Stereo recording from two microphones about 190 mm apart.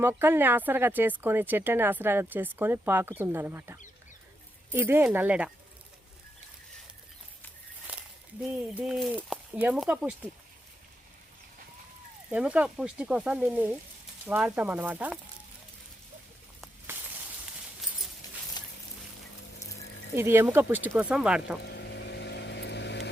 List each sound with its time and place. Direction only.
0.0 s speech: 10° right (ahead or behind)
8.7 s speech: 5° right (ahead or behind)
12.3 s speech: 5° right (ahead or behind)
18.6 s a sound: 20° left (ahead or behind)
20.1 s speech: 10° right (ahead or behind)
21.6 s vehicle: 65° left (ahead or behind)